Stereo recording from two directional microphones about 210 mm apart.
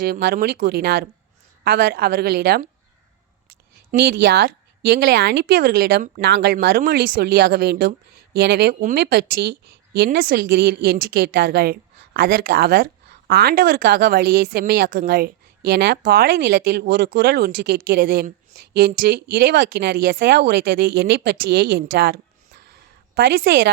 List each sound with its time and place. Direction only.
0.0 s a woman's voice: 45° right (ahead or behind)
3.9 s a woman's voice: 45° right (ahead or behind)
22.6 s a sound: 50° right (ahead or behind)